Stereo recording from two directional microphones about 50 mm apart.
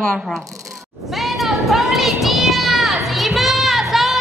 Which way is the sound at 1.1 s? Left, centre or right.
Centre.